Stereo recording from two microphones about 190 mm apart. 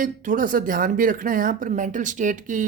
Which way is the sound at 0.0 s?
45° right (ahead or behind).